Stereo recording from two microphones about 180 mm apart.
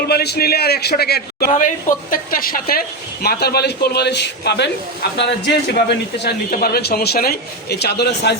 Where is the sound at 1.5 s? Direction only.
45° left (ahead or behind).